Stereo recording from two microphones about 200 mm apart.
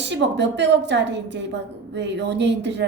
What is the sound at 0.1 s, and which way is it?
Speech, 60° right (ahead or behind).